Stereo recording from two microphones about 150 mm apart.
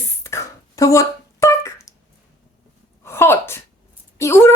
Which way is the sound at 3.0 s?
15° left (ahead or behind).